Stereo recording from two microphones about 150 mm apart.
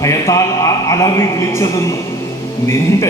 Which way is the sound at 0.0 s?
20° left (ahead or behind).